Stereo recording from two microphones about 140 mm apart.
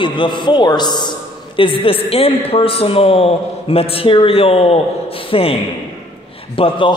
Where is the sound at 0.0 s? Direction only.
35° left (ahead or behind).